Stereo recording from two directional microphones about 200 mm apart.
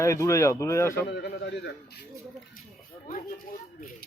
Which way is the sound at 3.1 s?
40° left (ahead or behind).